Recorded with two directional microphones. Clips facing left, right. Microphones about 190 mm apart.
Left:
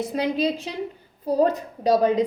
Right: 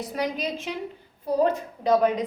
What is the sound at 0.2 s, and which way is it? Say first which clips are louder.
A woman's voice: left 4 dB; 30° left (ahead or behind).